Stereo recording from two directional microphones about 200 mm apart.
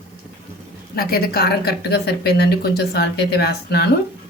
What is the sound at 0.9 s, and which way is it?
Speech, 50° left (ahead or behind).